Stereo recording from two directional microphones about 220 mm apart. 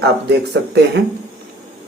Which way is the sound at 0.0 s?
50° right (ahead or behind).